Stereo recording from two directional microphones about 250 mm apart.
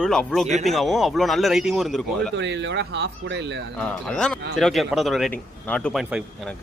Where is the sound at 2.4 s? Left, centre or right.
Right.